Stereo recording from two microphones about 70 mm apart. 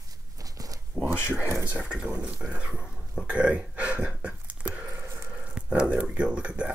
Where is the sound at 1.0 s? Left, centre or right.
Right.